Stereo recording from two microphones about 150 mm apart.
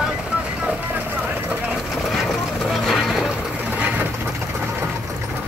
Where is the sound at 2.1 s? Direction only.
Centre (ahead or behind).